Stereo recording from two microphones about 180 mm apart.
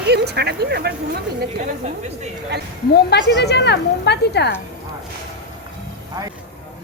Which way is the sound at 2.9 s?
70° left (ahead or behind).